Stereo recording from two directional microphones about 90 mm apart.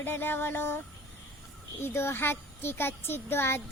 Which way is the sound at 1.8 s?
25° left (ahead or behind).